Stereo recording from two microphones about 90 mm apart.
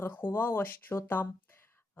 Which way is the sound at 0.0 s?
25° left (ahead or behind).